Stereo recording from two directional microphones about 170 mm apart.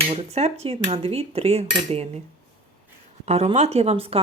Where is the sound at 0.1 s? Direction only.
40° right (ahead or behind).